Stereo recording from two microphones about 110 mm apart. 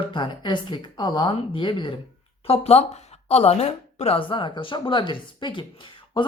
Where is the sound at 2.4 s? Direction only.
70° left (ahead or behind).